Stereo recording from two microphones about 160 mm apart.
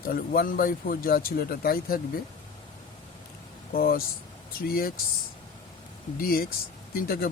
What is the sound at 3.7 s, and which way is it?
Speech, 70° left (ahead or behind).